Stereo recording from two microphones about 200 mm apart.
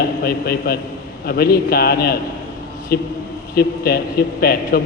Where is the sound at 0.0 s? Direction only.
50° left (ahead or behind).